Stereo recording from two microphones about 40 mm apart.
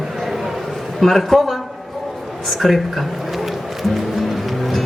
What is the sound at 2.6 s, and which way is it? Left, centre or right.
Speech, centre.